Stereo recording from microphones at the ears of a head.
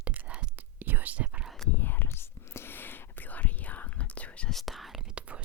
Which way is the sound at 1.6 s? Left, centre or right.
Left.